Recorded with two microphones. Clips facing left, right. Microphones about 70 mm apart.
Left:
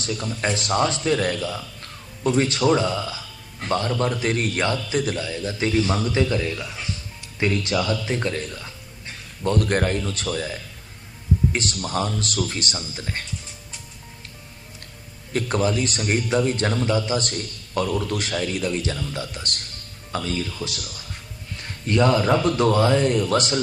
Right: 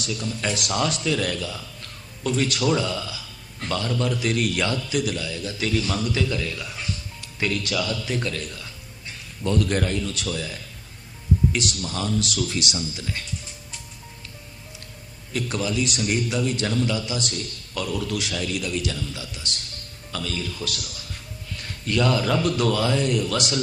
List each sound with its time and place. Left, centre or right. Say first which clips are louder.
0.0 s speech: left 2 dB; left
9.4 s speech: left 2 dB; left
15.3 s speech: left 4 dB; left
19.1 s speech: left 4 dB; left
20.1 s speech: left 4 dB; left
21.8 s speech: left 3 dB; left